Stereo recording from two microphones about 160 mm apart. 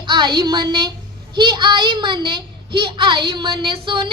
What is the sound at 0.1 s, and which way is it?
A woman's voice, 30° right (ahead or behind).